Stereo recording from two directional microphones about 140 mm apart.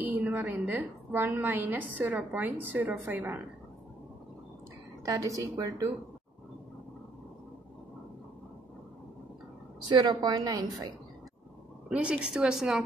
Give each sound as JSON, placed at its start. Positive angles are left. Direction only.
{"t": 0.0, "sound": "a woman's voice", "side_deg": -15}
{"t": 5.0, "sound": "a woman's voice", "side_deg": -20}
{"t": 9.8, "sound": "a woman's voice", "side_deg": -30}
{"t": 11.9, "sound": "a woman's voice", "side_deg": -5}